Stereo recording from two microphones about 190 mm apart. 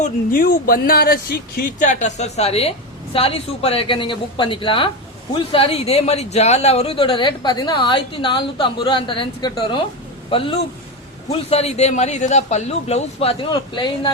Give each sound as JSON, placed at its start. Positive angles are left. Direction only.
{"t": 0.4, "sound": "speech", "side_deg": 55}
{"t": 1.8, "sound": "a woman's voice", "side_deg": 40}